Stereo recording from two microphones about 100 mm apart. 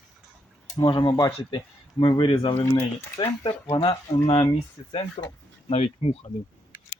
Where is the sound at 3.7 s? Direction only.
65° left (ahead or behind).